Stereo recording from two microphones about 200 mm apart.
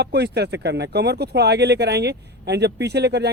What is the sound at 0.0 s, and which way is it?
Speech, 55° right (ahead or behind).